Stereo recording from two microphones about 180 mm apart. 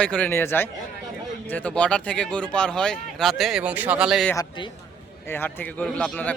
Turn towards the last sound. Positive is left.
turn(degrees=5)  # may be behind; listen again after turning